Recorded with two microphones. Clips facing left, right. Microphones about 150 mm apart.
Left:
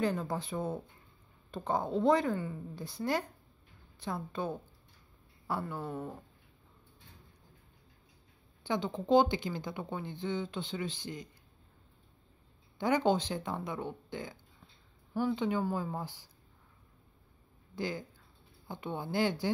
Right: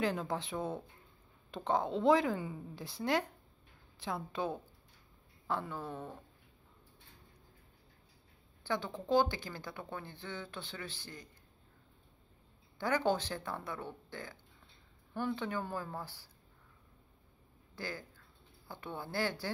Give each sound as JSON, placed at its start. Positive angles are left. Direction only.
{"t": 0.0, "sound": "a woman's voice", "side_deg": 0}
{"t": 8.6, "sound": "speech", "side_deg": 20}
{"t": 12.7, "sound": "speech", "side_deg": 20}
{"t": 17.7, "sound": "speech", "side_deg": 20}